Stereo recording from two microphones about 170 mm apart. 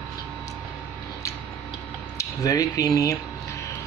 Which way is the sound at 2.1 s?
20° left (ahead or behind).